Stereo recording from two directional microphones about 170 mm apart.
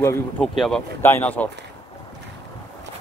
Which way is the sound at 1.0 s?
10° left (ahead or behind).